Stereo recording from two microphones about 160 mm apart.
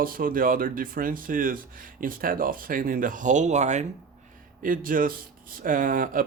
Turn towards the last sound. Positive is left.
turn(degrees=-60)  # may be behind; listen again after turning